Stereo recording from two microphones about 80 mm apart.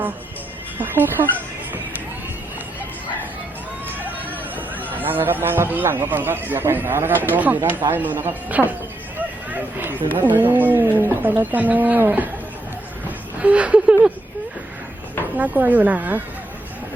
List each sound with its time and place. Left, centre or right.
0.8 s speech: right
3.8 s speech: right
15.4 s speech: right